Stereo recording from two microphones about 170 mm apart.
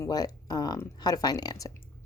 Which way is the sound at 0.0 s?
20° left (ahead or behind).